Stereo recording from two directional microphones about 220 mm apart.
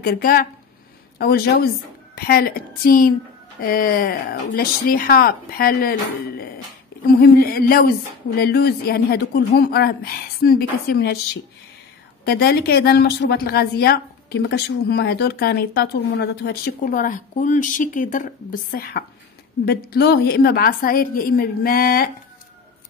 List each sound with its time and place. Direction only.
0.0 s a woman's voice: 40° left (ahead or behind)
12.3 s a woman's voice: 45° left (ahead or behind)